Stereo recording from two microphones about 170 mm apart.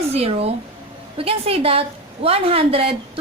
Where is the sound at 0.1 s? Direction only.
35° right (ahead or behind).